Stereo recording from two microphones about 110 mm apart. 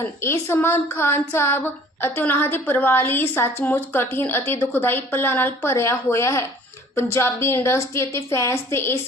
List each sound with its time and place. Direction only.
0.0 s speech: 25° left (ahead or behind)